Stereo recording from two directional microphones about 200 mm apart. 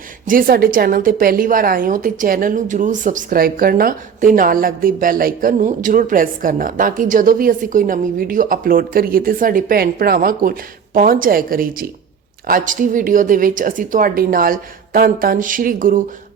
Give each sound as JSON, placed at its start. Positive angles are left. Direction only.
{"t": 0.3, "sound": "a woman's voice", "side_deg": -45}